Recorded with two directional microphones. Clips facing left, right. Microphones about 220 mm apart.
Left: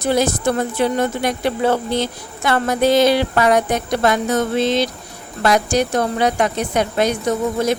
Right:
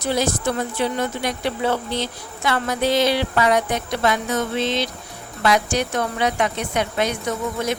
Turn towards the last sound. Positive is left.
turn(degrees=35)  # may be behind; listen again after turning